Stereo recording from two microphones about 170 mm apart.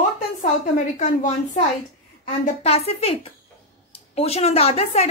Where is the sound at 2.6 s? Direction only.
35° left (ahead or behind).